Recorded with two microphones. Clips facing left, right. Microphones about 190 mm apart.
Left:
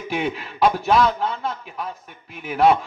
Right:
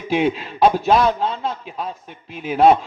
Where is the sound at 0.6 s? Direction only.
30° right (ahead or behind).